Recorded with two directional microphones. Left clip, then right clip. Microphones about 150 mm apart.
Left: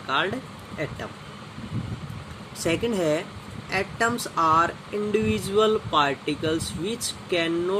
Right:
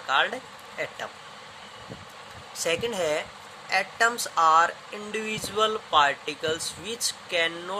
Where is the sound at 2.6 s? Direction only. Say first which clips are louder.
Left 2 dB; 25° right (ahead or behind).